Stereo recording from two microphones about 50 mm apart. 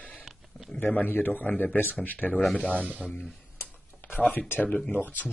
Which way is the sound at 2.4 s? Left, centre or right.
Centre.